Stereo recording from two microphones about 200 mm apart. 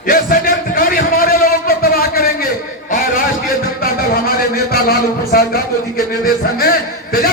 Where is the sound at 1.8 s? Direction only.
45° left (ahead or behind).